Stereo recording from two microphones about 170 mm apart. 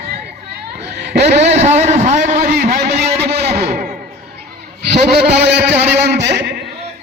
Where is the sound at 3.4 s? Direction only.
65° right (ahead or behind).